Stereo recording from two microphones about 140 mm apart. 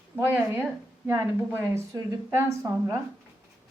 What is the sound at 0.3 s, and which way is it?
A woman's voice, 15° right (ahead or behind).